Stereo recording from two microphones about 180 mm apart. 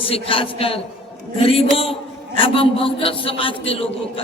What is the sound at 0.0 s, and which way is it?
A man's voice, 30° left (ahead or behind).